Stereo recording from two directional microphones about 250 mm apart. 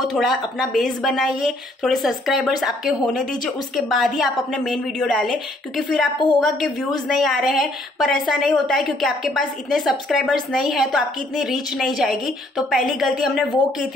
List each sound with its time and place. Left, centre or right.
0.0 s speech: centre
6.1 s a woman's voice: centre
6.4 s speech: centre